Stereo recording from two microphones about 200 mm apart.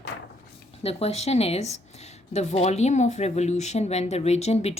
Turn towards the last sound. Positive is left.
turn(degrees=30)  # may be behind; listen again after turning